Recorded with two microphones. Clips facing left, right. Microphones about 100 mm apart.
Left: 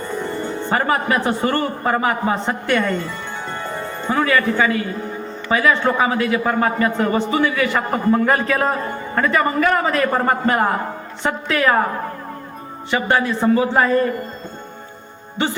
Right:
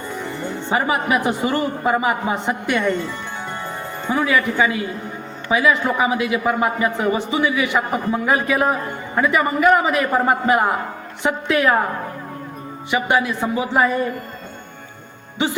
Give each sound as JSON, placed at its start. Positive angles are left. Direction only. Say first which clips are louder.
{"t": 0.7, "sound": "a man's voice", "louder": "even", "side_deg": -15}
{"t": 3.6, "sound": "music", "louder": "left 2 dB", "side_deg": -15}
{"t": 5.5, "sound": "a man's voice", "louder": "left 1 dB", "side_deg": -10}
{"t": 12.9, "sound": "a man's voice", "louder": "left 1 dB", "side_deg": -10}